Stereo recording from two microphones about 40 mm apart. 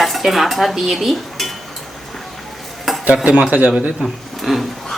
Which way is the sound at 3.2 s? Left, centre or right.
Right.